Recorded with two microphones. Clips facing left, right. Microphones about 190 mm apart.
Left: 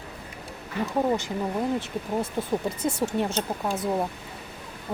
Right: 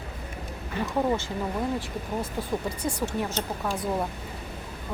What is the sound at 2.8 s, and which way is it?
Speech, 25° left (ahead or behind).